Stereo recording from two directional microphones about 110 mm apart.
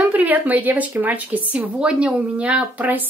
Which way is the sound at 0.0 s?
15° right (ahead or behind).